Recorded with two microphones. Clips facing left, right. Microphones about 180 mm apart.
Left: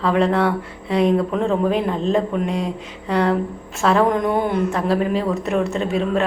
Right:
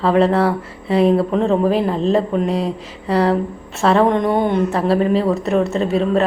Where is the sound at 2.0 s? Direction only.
Centre (ahead or behind).